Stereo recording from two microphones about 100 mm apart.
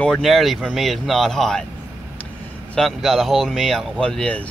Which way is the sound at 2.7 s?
Centre (ahead or behind).